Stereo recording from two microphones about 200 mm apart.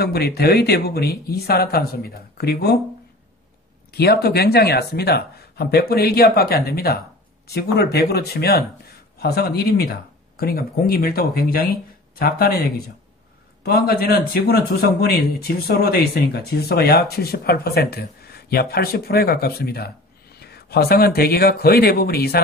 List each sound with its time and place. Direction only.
0.0 s a man's voice: 50° left (ahead or behind)
3.9 s a man's voice: 55° left (ahead or behind)
13.7 s a man's voice: 50° left (ahead or behind)